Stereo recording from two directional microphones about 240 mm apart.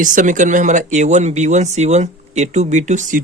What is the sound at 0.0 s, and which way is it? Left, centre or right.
A man's voice, right.